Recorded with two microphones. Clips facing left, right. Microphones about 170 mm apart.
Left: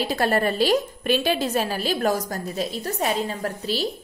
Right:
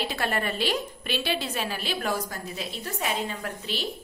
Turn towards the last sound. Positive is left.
turn(degrees=35)  # may be behind; listen again after turning